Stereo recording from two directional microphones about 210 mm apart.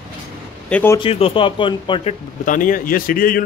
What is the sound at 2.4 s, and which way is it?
Speech, 40° left (ahead or behind).